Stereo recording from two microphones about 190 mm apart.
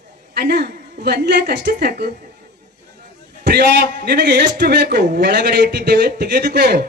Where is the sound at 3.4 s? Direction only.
55° right (ahead or behind).